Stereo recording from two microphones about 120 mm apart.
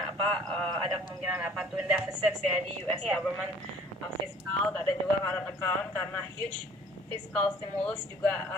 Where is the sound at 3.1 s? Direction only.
Centre (ahead or behind).